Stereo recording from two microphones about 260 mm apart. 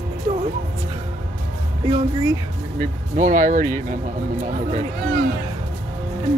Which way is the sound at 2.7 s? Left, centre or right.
Right.